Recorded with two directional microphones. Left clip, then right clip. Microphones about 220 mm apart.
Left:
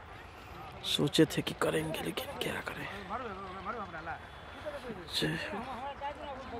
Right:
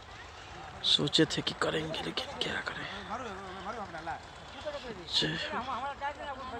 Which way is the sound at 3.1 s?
45° right (ahead or behind).